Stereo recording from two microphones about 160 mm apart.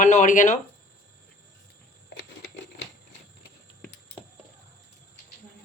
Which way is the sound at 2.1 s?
90° left.